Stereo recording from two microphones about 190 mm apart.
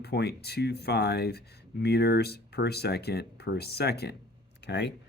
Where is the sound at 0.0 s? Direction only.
60° left (ahead or behind).